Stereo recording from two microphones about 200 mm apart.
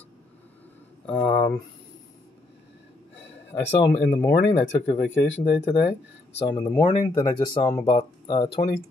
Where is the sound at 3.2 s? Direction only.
65° left (ahead or behind).